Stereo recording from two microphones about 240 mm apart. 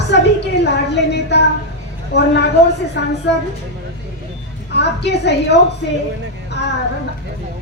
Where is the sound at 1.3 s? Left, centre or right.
Left.